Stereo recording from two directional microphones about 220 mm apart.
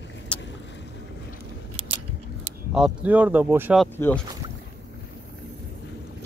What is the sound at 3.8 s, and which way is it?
Speech, 5° left (ahead or behind).